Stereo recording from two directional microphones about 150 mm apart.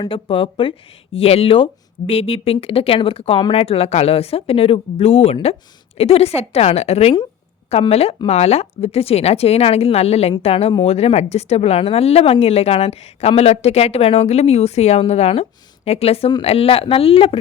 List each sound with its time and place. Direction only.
0.0 s speech: 35° left (ahead or behind)